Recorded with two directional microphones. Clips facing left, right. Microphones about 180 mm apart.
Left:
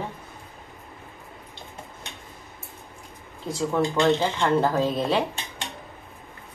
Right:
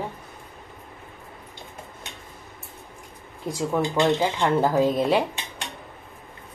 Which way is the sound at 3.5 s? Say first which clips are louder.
Even; 15° right (ahead or behind).